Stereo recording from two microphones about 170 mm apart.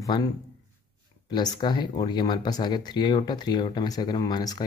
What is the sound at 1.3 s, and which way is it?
Speech, 25° left (ahead or behind).